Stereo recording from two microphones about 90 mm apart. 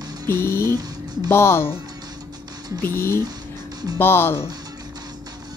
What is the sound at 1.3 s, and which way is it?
Speech, 25° left (ahead or behind).